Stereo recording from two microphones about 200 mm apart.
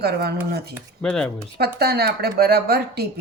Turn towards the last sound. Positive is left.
turn(degrees=-50)  # may be behind; listen again after turning